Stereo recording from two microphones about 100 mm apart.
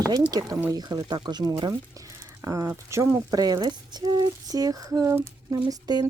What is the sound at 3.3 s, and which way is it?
Speech, 40° right (ahead or behind).